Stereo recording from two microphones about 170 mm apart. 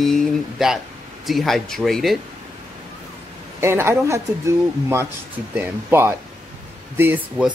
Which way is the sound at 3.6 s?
15° right (ahead or behind).